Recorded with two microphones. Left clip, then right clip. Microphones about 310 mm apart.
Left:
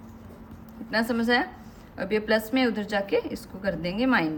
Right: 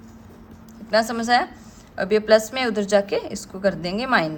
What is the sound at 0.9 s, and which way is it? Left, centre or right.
A woman's voice, centre.